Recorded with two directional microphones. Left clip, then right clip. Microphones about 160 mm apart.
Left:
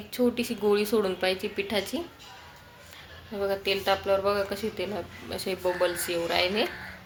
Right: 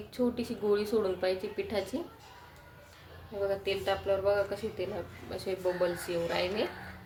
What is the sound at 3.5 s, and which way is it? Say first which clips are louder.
A woman's voice: left 6 dB; 25° left (ahead or behind).